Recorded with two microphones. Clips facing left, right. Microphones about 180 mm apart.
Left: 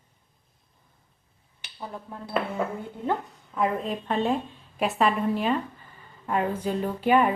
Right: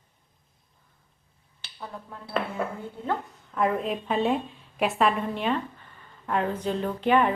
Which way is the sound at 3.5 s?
Centre (ahead or behind).